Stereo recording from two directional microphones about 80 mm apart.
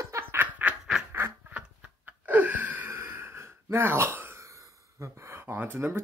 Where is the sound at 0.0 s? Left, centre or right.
Right.